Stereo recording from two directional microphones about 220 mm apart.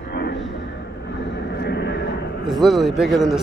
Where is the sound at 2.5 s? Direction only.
Centre (ahead or behind).